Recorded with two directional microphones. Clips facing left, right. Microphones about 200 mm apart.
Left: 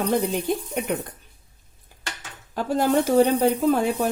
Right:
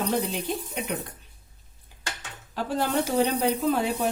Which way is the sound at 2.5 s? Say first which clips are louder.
Left 5 dB; 45° left (ahead or behind).